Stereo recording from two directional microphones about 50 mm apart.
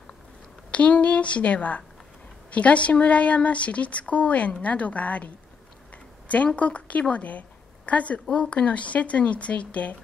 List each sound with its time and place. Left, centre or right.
0.7 s a woman's voice: left